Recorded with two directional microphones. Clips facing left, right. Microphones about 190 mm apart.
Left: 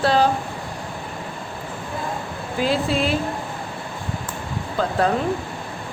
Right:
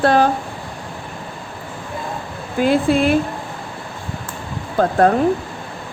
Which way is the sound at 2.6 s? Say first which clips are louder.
Right 6 dB; 55° right (ahead or behind).